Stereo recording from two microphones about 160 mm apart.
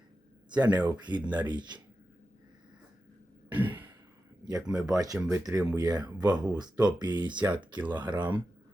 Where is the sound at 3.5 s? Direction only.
10° right (ahead or behind).